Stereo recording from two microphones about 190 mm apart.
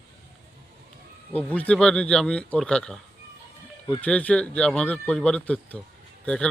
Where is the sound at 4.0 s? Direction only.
5° left (ahead or behind).